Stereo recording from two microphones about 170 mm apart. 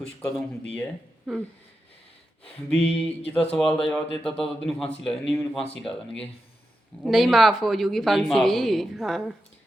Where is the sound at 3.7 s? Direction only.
5° left (ahead or behind).